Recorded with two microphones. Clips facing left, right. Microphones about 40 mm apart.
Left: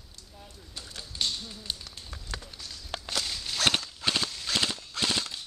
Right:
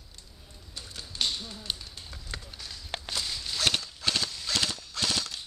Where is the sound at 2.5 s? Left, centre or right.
Centre.